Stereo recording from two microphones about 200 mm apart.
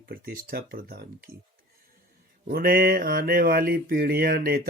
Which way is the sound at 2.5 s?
50° right (ahead or behind).